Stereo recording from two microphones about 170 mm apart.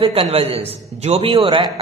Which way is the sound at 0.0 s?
35° right (ahead or behind).